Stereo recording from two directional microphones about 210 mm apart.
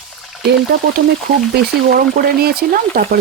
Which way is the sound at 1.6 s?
45° right (ahead or behind).